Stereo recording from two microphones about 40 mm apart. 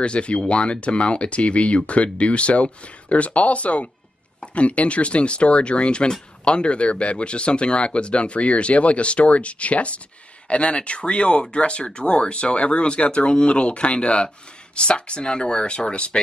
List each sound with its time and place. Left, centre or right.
0.0 s speech: left